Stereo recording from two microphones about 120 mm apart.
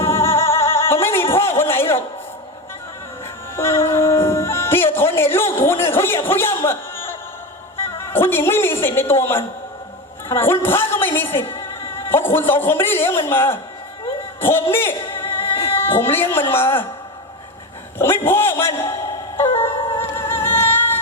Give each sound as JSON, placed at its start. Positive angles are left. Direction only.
{"t": 0.0, "sound": "music", "side_deg": 20}
{"t": 3.5, "sound": "music", "side_deg": 20}
{"t": 7.9, "sound": "a man's voice", "side_deg": 20}
{"t": 14.4, "sound": "music", "side_deg": 20}
{"t": 15.7, "sound": "a woman's voice", "side_deg": 20}
{"t": 18.3, "sound": "a man's voice", "side_deg": 20}
{"t": 19.5, "sound": "music", "side_deg": 20}